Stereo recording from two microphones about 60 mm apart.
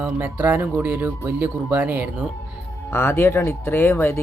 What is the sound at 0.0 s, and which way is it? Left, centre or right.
Speech, right.